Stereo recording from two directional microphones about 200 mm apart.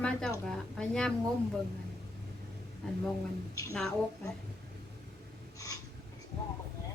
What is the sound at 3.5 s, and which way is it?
Speech, 15° left (ahead or behind).